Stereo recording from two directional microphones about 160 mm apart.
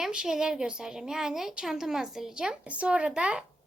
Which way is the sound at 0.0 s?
5° right (ahead or behind).